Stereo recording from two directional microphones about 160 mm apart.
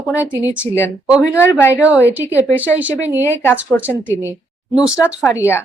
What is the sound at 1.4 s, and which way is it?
Speech, 15° left (ahead or behind).